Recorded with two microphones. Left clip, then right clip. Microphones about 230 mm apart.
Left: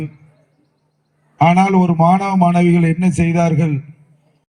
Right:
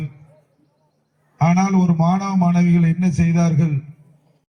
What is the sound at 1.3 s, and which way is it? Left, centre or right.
A man's voice, left.